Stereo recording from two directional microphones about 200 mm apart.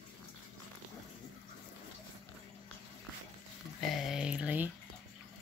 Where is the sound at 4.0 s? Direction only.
5° right (ahead or behind).